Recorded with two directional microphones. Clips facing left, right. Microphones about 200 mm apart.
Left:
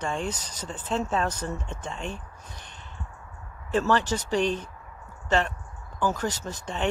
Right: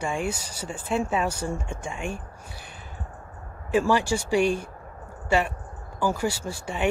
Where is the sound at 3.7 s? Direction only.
10° right (ahead or behind).